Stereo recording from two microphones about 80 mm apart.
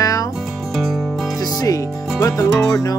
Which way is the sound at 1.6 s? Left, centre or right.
Left.